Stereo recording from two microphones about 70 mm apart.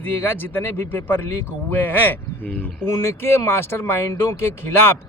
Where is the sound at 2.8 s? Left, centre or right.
Left.